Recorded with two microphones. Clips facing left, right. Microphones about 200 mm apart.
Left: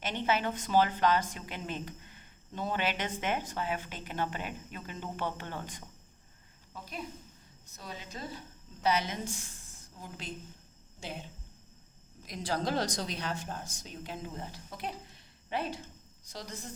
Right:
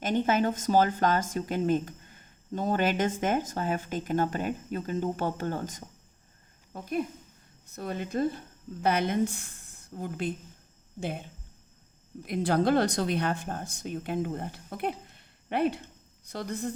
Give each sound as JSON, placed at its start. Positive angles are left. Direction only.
{"t": 0.0, "sound": "a woman's voice", "side_deg": -45}